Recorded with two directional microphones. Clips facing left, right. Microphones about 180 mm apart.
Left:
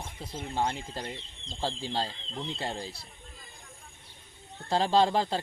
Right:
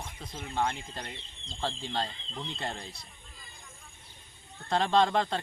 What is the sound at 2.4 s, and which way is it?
Speech, 30° left (ahead or behind).